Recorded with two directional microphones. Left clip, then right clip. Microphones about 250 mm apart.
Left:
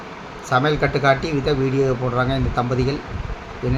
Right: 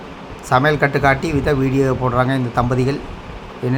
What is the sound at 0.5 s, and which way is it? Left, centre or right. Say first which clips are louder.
A man's voice: right 4 dB; centre.